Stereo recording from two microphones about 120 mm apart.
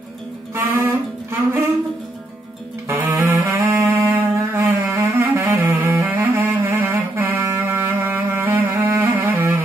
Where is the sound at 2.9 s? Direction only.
20° right (ahead or behind).